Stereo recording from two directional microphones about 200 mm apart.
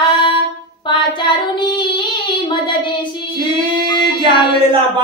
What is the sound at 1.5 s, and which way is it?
Child singing, 25° left (ahead or behind).